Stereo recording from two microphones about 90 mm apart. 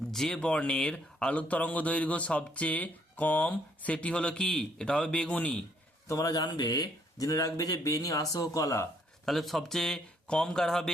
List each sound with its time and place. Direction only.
0.1 s speech: 5° left (ahead or behind)
6.1 s speech: 45° left (ahead or behind)
9.2 s speech: centre (ahead or behind)